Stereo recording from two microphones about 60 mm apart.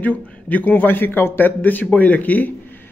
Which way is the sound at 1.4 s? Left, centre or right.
Left.